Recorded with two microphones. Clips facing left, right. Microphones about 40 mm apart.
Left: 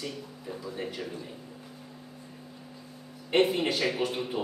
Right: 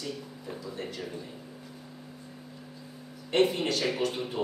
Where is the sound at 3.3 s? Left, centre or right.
Centre.